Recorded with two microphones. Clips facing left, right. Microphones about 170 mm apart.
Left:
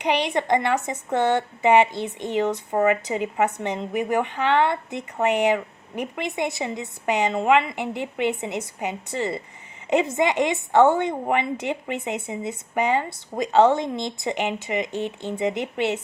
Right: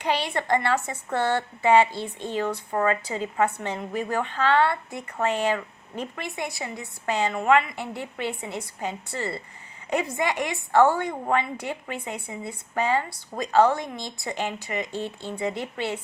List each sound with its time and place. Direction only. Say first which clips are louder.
0.0 s speech: left 4 dB; 20° left (ahead or behind)